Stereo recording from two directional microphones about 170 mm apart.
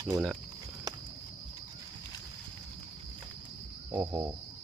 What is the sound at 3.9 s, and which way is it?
Speech, 20° right (ahead or behind).